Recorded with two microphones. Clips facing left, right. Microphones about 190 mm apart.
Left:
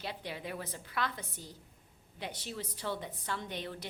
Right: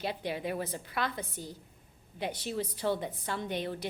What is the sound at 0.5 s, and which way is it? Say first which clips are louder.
Speech: right 6 dB; 30° right (ahead or behind).